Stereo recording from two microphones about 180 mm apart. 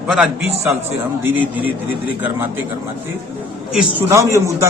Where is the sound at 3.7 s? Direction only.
15° right (ahead or behind).